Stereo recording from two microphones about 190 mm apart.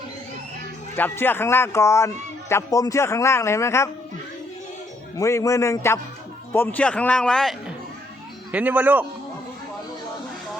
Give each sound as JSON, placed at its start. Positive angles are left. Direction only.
{"t": 0.9, "sound": "a man's voice", "side_deg": 10}
{"t": 5.1, "sound": "a man's voice", "side_deg": 15}
{"t": 8.5, "sound": "speech", "side_deg": -10}